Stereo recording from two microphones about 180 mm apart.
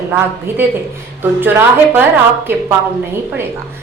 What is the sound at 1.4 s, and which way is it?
Speech, 10° right (ahead or behind).